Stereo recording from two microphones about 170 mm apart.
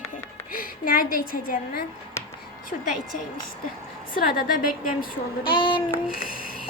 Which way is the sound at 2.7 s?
55° left (ahead or behind).